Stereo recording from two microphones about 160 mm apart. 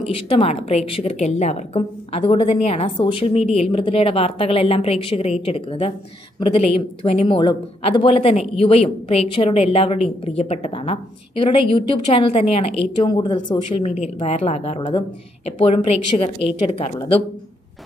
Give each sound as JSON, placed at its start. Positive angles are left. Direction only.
{"t": 0.0, "sound": "a woman's voice", "side_deg": 35}